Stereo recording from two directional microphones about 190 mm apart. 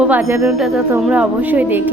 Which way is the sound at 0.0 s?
10° right (ahead or behind).